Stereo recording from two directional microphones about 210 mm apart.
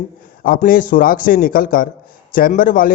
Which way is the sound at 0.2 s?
40° left (ahead or behind).